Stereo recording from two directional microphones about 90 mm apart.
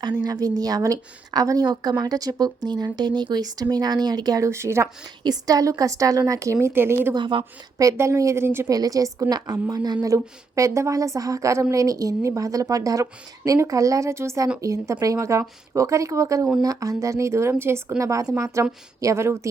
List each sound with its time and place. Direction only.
0.2 s a woman's voice: 45° right (ahead or behind)
5.2 s a woman's voice: 45° right (ahead or behind); by 7.1 s 25° right (ahead or behind)
7.1 s a woman's voice: 60° right (ahead or behind)
7.8 s a woman's voice: 35° right (ahead or behind)
8.7 s a woman's voice: 40° right (ahead or behind); by 18.0 s 25° right (ahead or behind)
18.0 s a woman's voice: 35° right (ahead or behind)